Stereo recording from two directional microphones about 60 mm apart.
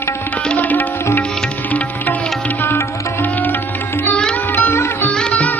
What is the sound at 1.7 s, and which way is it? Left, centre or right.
Music, left.